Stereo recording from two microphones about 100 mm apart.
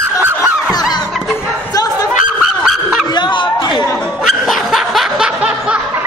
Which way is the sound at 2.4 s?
5° right (ahead or behind).